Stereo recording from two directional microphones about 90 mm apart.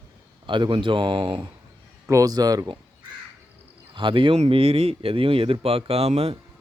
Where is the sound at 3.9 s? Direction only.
70° right (ahead or behind).